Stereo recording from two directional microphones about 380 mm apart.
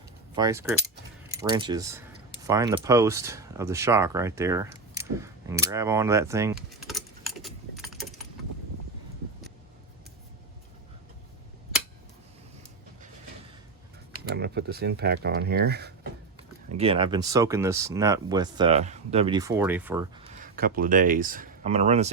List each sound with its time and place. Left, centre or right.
0.3 s speech: centre
1.4 s a sound: centre
14.3 s speech: right
16.4 s speech: centre